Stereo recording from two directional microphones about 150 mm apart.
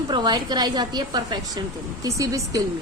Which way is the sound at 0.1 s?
30° right (ahead or behind).